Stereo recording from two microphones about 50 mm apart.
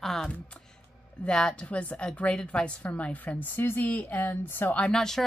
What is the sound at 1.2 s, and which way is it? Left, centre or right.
Speech, centre.